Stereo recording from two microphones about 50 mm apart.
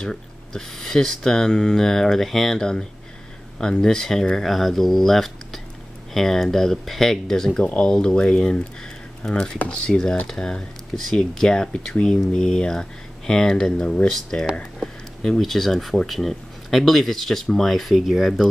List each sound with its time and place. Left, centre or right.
0.0 s speech: centre